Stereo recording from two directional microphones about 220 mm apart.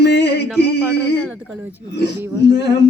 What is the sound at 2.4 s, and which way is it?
Female singing, 50° left (ahead or behind).